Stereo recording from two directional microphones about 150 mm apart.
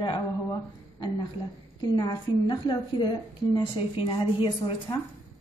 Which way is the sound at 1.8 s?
25° left (ahead or behind).